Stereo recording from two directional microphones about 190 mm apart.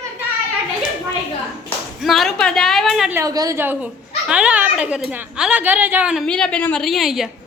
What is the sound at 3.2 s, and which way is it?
A woman's voice, 20° right (ahead or behind).